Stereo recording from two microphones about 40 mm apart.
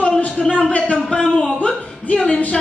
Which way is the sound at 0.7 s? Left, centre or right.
Left.